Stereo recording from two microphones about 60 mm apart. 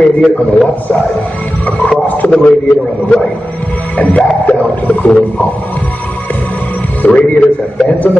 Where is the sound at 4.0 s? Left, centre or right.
Left.